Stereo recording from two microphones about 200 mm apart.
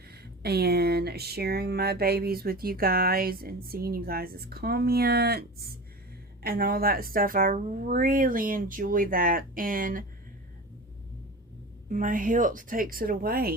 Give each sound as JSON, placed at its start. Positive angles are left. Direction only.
{"t": 0.0, "sound": "speech", "side_deg": -50}
{"t": 11.9, "sound": "speech", "side_deg": -40}